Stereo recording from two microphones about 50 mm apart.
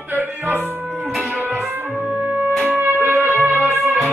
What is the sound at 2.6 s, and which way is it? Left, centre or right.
Music, right.